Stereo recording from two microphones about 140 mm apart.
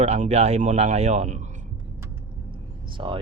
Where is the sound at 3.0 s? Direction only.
40° right (ahead or behind).